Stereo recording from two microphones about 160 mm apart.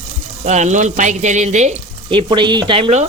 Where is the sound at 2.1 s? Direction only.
35° right (ahead or behind).